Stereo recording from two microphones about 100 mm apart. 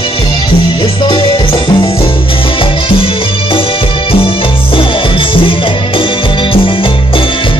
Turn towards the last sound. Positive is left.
turn(degrees=60)  # may be behind; listen again after turning